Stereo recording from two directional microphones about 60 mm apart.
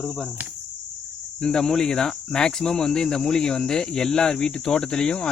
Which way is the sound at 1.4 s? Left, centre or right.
Centre.